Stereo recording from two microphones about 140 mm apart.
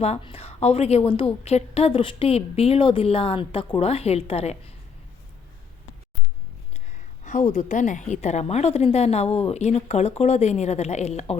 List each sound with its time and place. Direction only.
0.0 s a woman's voice: 45° left (ahead or behind)
7.3 s a woman's voice: 60° left (ahead or behind)